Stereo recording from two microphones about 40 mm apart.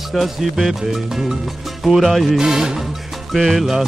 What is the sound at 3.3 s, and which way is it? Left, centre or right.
Music, centre.